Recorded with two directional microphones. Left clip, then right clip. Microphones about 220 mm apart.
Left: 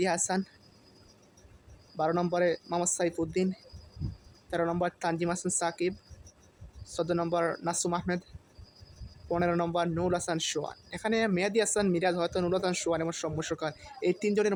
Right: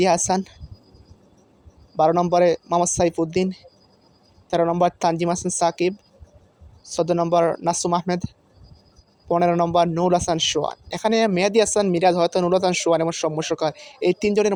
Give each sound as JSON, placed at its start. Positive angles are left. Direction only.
{"t": 0.3, "sound": "speech", "side_deg": -25}
{"t": 2.0, "sound": "speech", "side_deg": -25}
{"t": 6.9, "sound": "speech", "side_deg": -25}
{"t": 9.3, "sound": "speech", "side_deg": -25}